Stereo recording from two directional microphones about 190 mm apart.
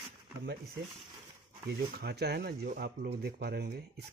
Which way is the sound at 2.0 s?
60° right (ahead or behind).